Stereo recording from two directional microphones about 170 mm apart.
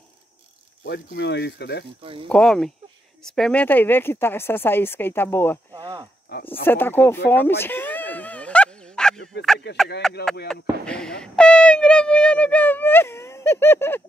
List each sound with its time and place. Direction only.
0.8 s speech: 80° left
2.2 s speech: 5° left (ahead or behind)
5.7 s a sound: 25° right (ahead or behind)
6.6 s speech: 10° left (ahead or behind)
7.6 s a sound: 10° left (ahead or behind)
9.6 s speech: 80° left
10.0 s speech: centre (ahead or behind)